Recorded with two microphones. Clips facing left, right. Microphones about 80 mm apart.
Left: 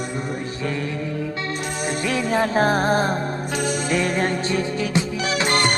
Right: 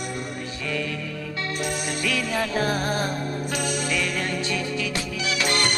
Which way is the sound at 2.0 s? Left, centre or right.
Left.